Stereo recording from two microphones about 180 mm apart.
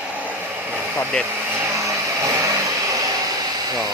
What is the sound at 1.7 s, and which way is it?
Vehicle, 15° right (ahead or behind).